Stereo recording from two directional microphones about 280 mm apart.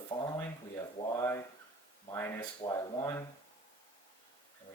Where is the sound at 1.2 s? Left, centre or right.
Centre.